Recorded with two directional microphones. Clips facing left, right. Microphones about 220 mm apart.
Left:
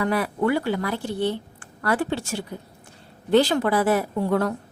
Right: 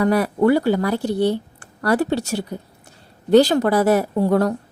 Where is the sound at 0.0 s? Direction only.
40° right (ahead or behind).